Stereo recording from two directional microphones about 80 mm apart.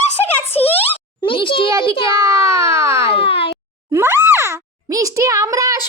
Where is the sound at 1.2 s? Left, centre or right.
Left.